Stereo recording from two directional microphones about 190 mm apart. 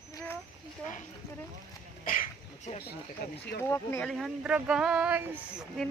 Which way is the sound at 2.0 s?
45° left (ahead or behind).